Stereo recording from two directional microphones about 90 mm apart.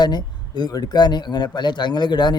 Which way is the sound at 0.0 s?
50° left (ahead or behind).